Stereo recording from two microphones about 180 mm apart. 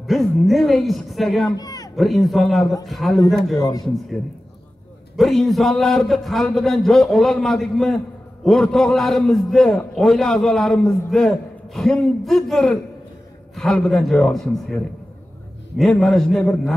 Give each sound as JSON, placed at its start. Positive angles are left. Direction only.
{"t": 0.0, "sound": "a man's voice", "side_deg": 0}
{"t": 1.6, "sound": "a sound", "side_deg": 20}
{"t": 2.0, "sound": "a man's voice", "side_deg": 0}
{"t": 3.5, "sound": "speech", "side_deg": 20}
{"t": 5.1, "sound": "a man's voice", "side_deg": 0}
{"t": 15.8, "sound": "a man's voice", "side_deg": 0}